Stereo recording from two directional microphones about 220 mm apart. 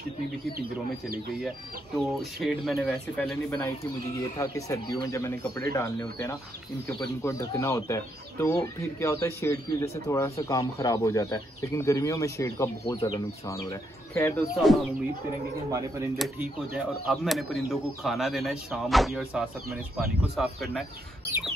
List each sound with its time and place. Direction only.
2.0 s speech: centre (ahead or behind)
3.4 s speech: 10° left (ahead or behind)
14.5 s speech: centre (ahead or behind)
16.2 s speech: 5° right (ahead or behind)